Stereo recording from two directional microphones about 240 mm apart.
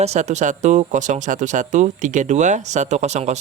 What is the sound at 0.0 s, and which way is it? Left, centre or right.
Speech, right.